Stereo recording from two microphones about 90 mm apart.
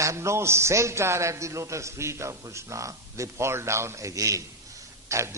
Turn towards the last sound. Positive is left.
turn(degrees=-35)  # may be behind; listen again after turning